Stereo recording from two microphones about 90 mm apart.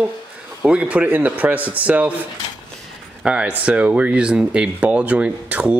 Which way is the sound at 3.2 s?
10° right (ahead or behind).